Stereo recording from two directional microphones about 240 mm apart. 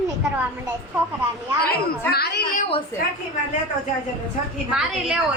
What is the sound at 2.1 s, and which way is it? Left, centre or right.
Speech, left.